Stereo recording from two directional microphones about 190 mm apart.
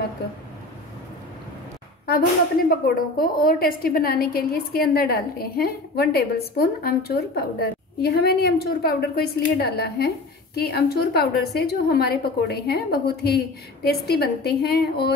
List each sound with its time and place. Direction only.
2.7 s a woman's voice: 50° left (ahead or behind)